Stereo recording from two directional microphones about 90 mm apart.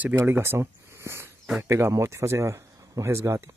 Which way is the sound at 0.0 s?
25° right (ahead or behind).